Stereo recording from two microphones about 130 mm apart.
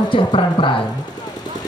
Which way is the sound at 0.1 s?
40° left (ahead or behind).